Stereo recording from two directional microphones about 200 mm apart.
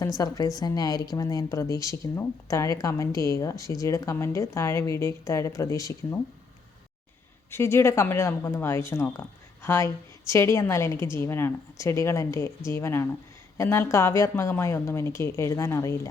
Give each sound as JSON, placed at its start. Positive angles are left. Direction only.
{"t": 0.2, "sound": "a woman's voice", "side_deg": 20}
{"t": 7.5, "sound": "a woman's voice", "side_deg": 10}